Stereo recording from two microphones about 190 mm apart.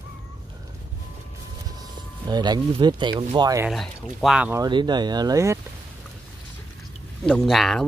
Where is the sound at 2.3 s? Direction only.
20° right (ahead or behind).